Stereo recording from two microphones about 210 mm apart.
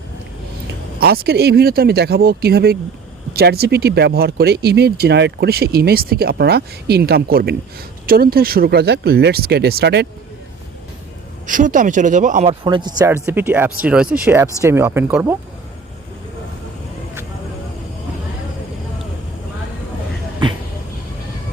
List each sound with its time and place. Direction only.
0.9 s speech: 50° right (ahead or behind)
11.4 s speech: 40° right (ahead or behind)
12.6 s speech: 20° right (ahead or behind)